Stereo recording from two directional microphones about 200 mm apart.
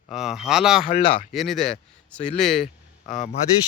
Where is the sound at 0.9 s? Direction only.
30° left (ahead or behind).